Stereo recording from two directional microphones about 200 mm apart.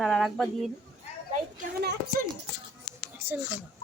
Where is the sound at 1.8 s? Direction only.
55° right (ahead or behind).